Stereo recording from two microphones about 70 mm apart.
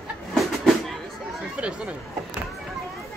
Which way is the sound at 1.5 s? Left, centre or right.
Centre.